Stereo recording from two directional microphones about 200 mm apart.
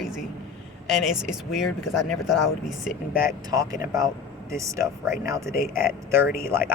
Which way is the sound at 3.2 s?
15° right (ahead or behind).